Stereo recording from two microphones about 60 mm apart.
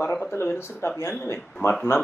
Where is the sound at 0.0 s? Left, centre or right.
Left.